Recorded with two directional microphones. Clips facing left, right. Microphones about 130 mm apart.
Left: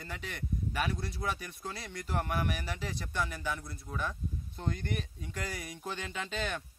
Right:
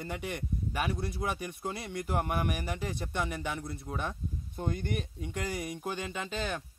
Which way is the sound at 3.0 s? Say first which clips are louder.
Right 2 dB; 20° right (ahead or behind).